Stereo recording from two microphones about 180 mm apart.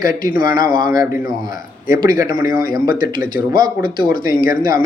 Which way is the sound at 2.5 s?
55° left (ahead or behind).